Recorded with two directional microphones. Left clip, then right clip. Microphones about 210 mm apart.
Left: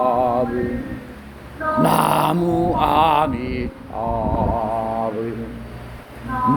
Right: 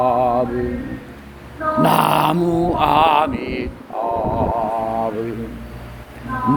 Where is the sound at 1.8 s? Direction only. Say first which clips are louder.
Right 2 dB; 5° right (ahead or behind).